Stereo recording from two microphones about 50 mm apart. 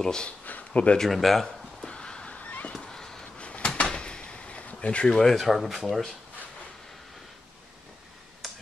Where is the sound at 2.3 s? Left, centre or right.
Left.